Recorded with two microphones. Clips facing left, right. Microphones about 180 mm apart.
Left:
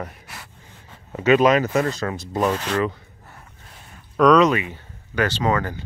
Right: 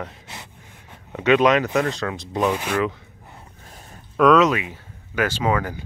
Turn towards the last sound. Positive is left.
turn(degrees=-10)  # may be behind; listen again after turning